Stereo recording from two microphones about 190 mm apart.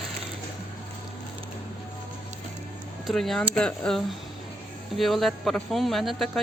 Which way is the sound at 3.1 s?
Centre (ahead or behind).